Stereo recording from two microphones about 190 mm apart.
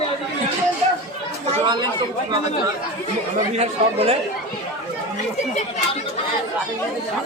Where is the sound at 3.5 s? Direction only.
35° right (ahead or behind).